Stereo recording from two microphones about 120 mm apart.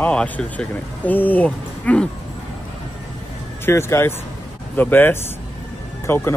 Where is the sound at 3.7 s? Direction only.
20° left (ahead or behind).